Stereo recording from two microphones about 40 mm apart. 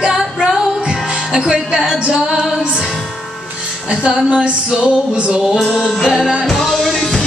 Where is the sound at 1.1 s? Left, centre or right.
Centre.